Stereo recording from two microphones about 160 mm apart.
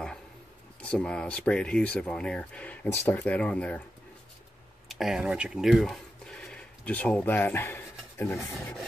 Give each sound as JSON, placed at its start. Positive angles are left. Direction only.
{"t": 0.7, "sound": "speech", "side_deg": 5}
{"t": 4.8, "sound": "speech", "side_deg": 0}